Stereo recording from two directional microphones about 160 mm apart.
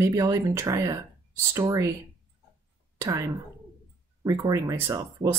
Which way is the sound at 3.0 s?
15° right (ahead or behind).